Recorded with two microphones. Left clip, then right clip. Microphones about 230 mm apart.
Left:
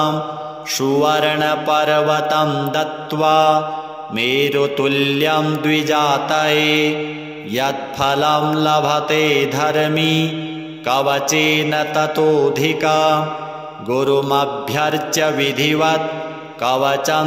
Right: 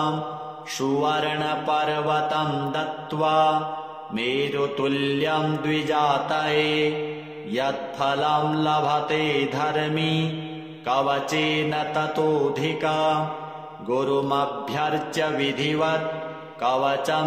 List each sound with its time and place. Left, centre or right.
0.7 s mantra: left